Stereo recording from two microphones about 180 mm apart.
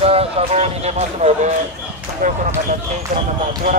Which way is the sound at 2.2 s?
50° right (ahead or behind).